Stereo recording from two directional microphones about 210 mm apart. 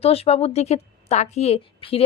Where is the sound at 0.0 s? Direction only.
30° left (ahead or behind).